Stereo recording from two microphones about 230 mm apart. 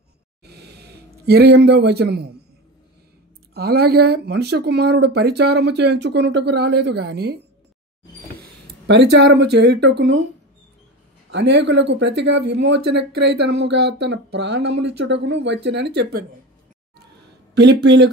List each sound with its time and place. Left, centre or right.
0.5 s a sound: right
3.5 s speech: right
8.8 s speech: right
11.3 s speech: right
17.6 s speech: right